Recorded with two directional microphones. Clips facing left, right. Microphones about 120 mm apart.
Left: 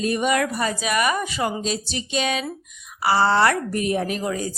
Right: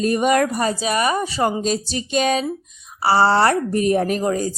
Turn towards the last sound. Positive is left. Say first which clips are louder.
# right 5 dB
turn(degrees=-40)  # may be behind; listen again after turning